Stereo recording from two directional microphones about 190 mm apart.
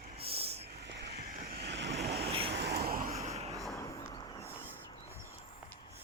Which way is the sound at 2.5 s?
60° right (ahead or behind).